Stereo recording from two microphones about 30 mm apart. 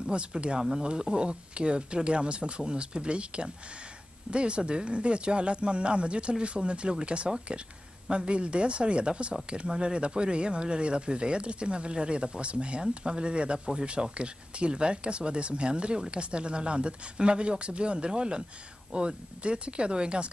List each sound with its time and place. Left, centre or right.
0.0 s speech: right
8.3 s speech: right